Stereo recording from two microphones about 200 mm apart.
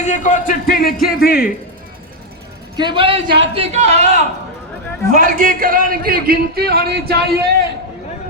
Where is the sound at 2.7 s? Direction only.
25° right (ahead or behind).